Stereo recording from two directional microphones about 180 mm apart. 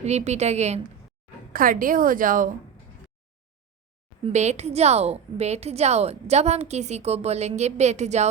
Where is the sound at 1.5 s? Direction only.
50° right (ahead or behind).